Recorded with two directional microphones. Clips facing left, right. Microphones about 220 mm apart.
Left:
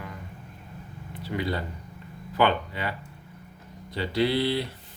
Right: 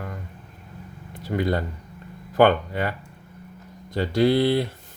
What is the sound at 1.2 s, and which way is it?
Speech, 45° right (ahead or behind).